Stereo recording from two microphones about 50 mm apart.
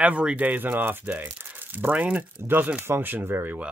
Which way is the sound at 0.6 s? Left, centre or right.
Right.